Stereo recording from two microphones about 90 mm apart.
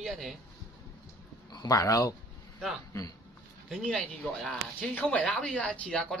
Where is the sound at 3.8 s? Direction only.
5° left (ahead or behind).